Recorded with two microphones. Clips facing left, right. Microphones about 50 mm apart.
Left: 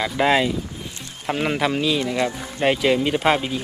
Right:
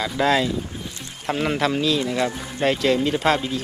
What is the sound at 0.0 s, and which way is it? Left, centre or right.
Speech, left.